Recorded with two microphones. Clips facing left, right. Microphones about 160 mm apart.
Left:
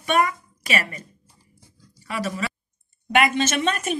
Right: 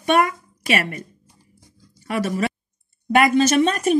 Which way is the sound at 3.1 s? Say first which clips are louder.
Right 5 dB; 40° right (ahead or behind).